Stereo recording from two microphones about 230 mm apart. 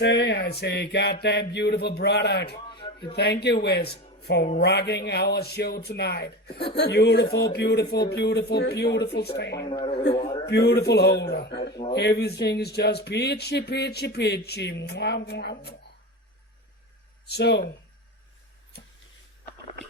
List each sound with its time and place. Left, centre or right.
0.0 s speech: left
2.6 s a sound: centre
3.2 s speech: left
9.6 s a man's voice: centre
10.4 s speech: left
11.7 s a man's voice: centre
11.9 s speech: left
17.2 s speech: left